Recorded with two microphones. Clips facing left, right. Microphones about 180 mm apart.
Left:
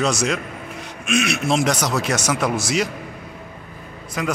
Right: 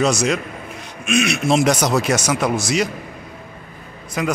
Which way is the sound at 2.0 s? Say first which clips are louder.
Right 2 dB; 5° right (ahead or behind).